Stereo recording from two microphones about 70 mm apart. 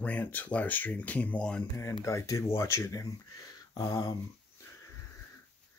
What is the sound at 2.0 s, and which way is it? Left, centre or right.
Speech, left.